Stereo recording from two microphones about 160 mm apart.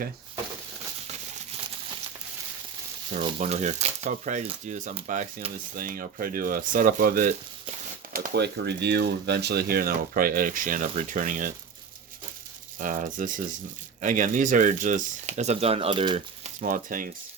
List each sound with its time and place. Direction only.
3.1 s speech: 45° right (ahead or behind); by 7.3 s 60° right (ahead or behind)
8.1 s speech: 80° right; by 11.5 s 55° right (ahead or behind)
12.8 s speech: 55° right (ahead or behind); by 16.5 s 40° right (ahead or behind)
16.6 s speech: 60° right (ahead or behind)